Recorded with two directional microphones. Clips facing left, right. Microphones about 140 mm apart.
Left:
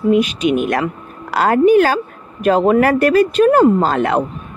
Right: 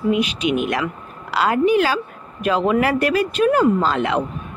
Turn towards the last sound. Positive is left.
turn(degrees=45)  # may be behind; listen again after turning